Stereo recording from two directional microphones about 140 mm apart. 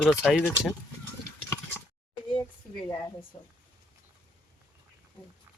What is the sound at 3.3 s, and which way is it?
Speech, 40° left (ahead or behind).